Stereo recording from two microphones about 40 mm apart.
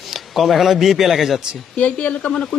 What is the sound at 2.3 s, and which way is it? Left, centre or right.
Speech, centre.